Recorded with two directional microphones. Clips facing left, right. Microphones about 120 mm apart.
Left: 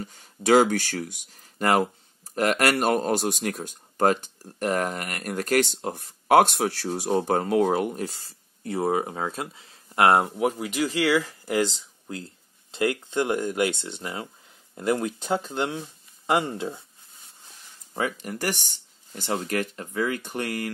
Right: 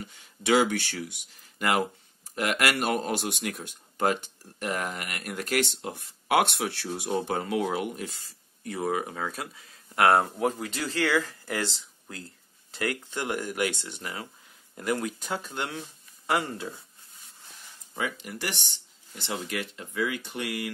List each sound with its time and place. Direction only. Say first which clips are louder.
0.0 s speech: left 5 dB; 40° left (ahead or behind)
17.9 s speech: left 4 dB; 45° left (ahead or behind)